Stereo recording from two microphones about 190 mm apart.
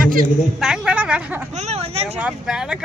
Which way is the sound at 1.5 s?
35° right (ahead or behind).